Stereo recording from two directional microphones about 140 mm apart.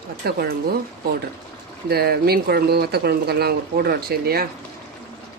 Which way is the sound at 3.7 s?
90° right.